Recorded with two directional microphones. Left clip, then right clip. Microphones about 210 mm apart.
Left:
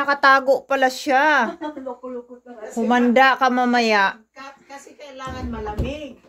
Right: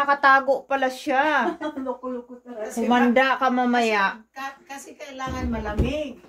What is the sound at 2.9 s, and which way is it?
Speech, 50° left (ahead or behind).